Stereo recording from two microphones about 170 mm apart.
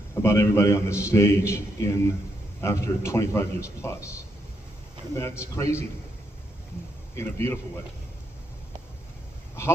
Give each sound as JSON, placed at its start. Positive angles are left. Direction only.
{"t": 0.2, "sound": "a man's voice", "side_deg": 15}
{"t": 5.1, "sound": "a man's voice", "side_deg": 15}
{"t": 7.2, "sound": "a man's voice", "side_deg": 15}